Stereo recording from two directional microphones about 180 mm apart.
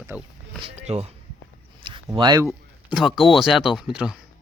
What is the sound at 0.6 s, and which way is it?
Speech, 35° right (ahead or behind).